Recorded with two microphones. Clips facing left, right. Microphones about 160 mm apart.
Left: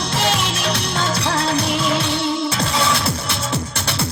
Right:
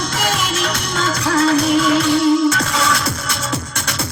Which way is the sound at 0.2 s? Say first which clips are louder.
Even; 30° left (ahead or behind).